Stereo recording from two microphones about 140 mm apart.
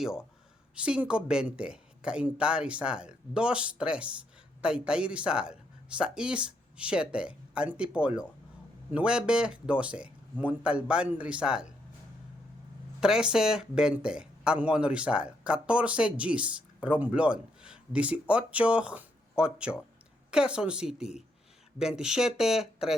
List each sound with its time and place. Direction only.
0.0 s speech: 5° right (ahead or behind)
13.0 s speech: 5° right (ahead or behind)